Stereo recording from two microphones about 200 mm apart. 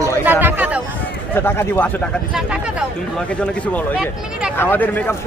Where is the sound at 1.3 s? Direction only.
10° left (ahead or behind).